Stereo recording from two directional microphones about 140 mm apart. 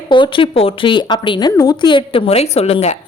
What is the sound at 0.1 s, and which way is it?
A woman's voice, 35° left (ahead or behind).